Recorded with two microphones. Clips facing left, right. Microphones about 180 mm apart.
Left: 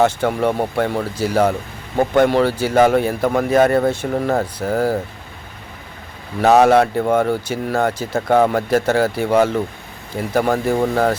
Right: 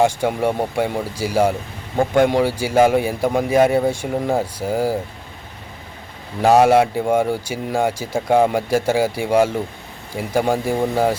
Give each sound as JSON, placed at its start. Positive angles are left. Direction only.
{"t": 0.0, "sound": "speech", "side_deg": -10}
{"t": 6.4, "sound": "speech", "side_deg": -10}